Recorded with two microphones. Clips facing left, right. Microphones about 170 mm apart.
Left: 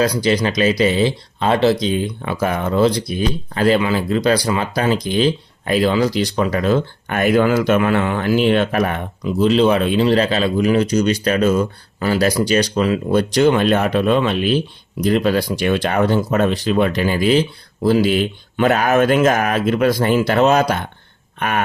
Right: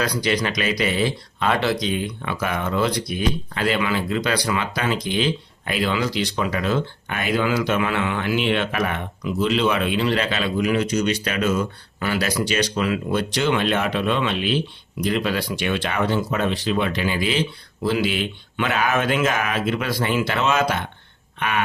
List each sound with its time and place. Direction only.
0.0 s speech: 30° left (ahead or behind)